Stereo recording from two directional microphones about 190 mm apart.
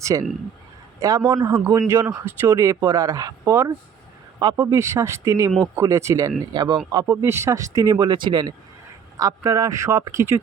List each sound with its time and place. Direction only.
0.0 s a man's voice: 15° right (ahead or behind)